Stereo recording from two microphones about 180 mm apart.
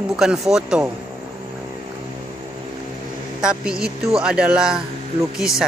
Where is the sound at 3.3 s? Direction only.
5° right (ahead or behind).